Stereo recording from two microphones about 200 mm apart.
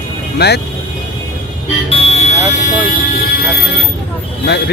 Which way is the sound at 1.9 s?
30° left (ahead or behind).